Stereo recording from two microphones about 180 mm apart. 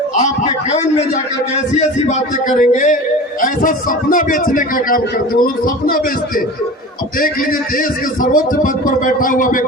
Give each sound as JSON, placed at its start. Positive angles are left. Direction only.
{"t": 0.2, "sound": "a man's voice", "side_deg": 40}
{"t": 7.8, "sound": "a man's voice", "side_deg": 50}